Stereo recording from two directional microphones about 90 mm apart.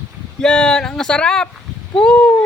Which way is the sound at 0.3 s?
10° left (ahead or behind).